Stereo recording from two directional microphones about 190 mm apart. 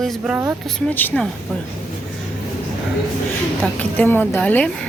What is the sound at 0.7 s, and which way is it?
Speech, 5° left (ahead or behind).